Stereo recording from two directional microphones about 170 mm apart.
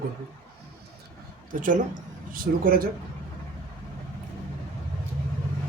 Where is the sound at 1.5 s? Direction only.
50° right (ahead or behind).